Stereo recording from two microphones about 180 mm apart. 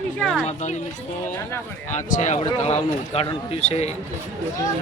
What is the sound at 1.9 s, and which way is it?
Speech, 40° left (ahead or behind).